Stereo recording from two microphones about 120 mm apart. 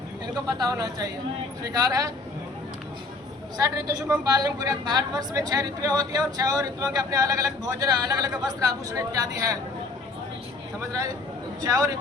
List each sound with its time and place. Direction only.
0.4 s a woman's voice: 30° right (ahead or behind)
3.8 s a woman's voice: 30° right (ahead or behind)
11.6 s speech: 30° right (ahead or behind)